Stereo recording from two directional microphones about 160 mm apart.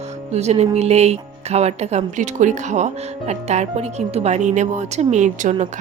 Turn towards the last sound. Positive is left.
turn(degrees=-50)  # may be behind; listen again after turning